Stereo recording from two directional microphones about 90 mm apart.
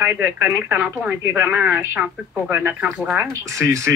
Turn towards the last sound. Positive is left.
turn(degrees=-35)  # may be behind; listen again after turning